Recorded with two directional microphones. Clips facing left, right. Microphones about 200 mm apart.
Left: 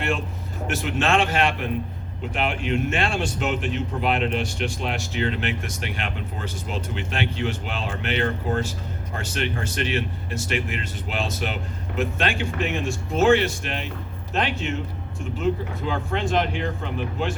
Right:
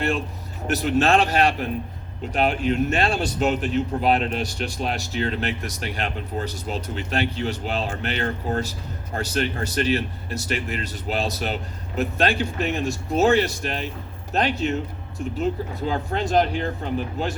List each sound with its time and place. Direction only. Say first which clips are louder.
0.7 s a man's voice: right 4 dB; 40° right (ahead or behind)